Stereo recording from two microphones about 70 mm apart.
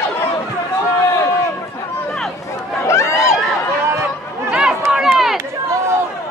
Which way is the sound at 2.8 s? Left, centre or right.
Left.